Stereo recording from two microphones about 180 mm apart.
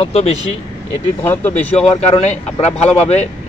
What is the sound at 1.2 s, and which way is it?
Speech, 10° left (ahead or behind).